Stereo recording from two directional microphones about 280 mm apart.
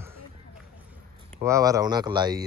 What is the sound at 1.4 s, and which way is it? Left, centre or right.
Speech, centre.